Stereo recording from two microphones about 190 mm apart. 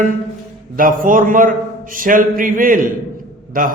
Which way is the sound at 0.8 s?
45° right (ahead or behind).